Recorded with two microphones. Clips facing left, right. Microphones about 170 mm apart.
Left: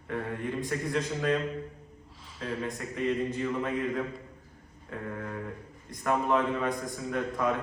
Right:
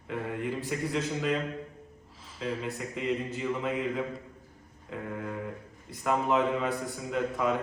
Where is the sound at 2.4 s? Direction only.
Centre (ahead or behind).